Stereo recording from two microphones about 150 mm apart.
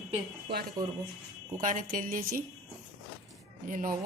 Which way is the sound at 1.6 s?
60° right (ahead or behind).